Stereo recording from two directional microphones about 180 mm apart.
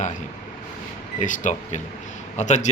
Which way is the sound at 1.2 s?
45° left (ahead or behind).